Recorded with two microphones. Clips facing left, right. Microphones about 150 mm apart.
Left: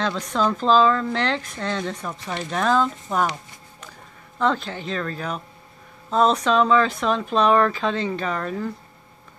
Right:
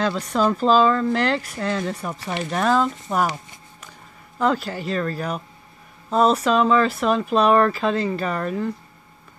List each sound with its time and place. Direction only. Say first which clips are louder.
0.0 s speech: right 2 dB; 5° right (ahead or behind)
4.4 s speech: right 1 dB; 5° right (ahead or behind)